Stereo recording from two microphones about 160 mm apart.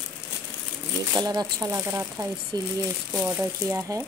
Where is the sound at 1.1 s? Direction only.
25° right (ahead or behind).